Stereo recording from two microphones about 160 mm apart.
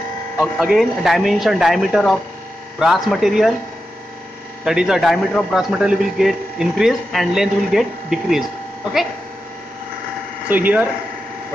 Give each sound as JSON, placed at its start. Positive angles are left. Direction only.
{"t": 0.4, "sound": "a man's voice", "side_deg": -5}
{"t": 4.6, "sound": "a man's voice", "side_deg": -5}
{"t": 10.5, "sound": "speech", "side_deg": -10}